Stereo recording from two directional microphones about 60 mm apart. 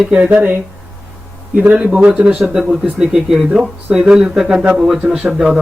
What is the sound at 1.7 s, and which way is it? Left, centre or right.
Speech, centre.